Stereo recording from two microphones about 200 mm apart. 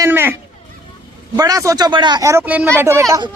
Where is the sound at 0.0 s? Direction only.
10° right (ahead or behind).